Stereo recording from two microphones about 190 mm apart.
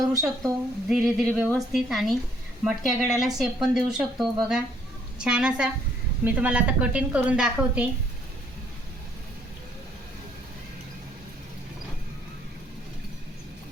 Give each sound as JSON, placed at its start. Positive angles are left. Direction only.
{"t": 0.4, "sound": "a woman's voice", "side_deg": 0}